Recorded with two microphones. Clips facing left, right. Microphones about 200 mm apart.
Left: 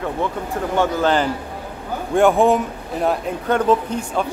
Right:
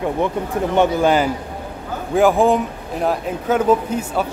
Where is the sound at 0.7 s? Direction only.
10° right (ahead or behind).